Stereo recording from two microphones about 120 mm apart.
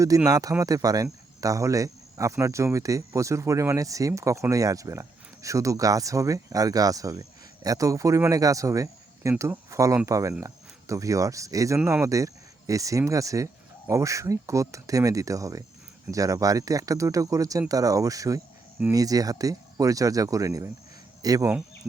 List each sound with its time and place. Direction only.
0.3 s speech: 30° right (ahead or behind)